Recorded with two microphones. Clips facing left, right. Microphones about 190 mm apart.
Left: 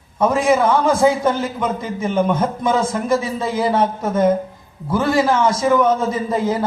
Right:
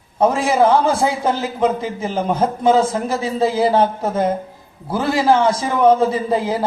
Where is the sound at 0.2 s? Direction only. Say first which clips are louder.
Right 1 dB; 30° right (ahead or behind).